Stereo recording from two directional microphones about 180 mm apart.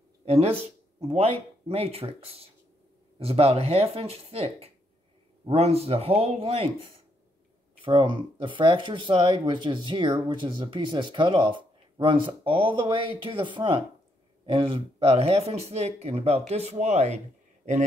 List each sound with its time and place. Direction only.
0.2 s speech: 35° right (ahead or behind)
7.8 s speech: 30° right (ahead or behind)